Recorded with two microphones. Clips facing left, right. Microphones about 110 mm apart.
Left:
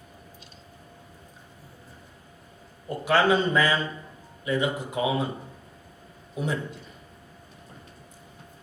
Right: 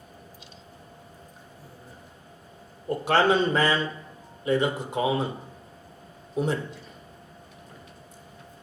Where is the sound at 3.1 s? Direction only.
30° right (ahead or behind).